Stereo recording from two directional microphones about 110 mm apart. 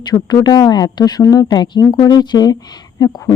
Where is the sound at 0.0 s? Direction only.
40° left (ahead or behind).